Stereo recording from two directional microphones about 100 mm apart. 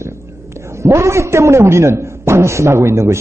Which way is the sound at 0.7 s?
30° right (ahead or behind).